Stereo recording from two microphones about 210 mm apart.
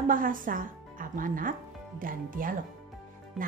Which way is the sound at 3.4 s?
Centre (ahead or behind).